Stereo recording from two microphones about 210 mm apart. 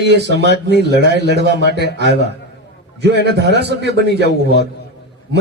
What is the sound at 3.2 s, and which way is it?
Speech, 55° right (ahead or behind).